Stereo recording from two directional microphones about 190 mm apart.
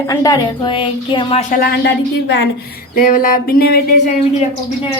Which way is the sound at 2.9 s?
45° left (ahead or behind).